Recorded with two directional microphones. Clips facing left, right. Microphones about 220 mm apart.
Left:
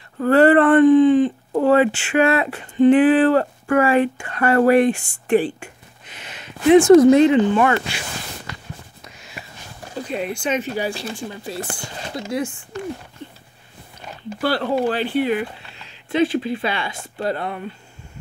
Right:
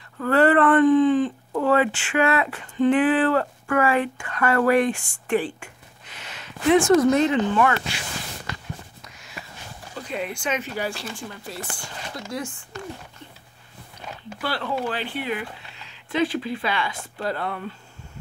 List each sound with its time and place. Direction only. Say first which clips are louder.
0.2 s speech: left 5 dB; 30° left (ahead or behind)
9.0 s a sound: left 3 dB; 25° left (ahead or behind)
10.1 s speech: left 4 dB; 25° left (ahead or behind)
14.4 s speech: left 7 dB; 40° left (ahead or behind); by 17.7 s 15° left (ahead or behind)